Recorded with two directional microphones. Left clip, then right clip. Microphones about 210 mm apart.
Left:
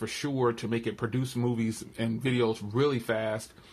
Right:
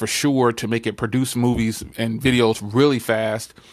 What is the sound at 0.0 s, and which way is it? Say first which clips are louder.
Speech: right 10 dB; 50° right (ahead or behind).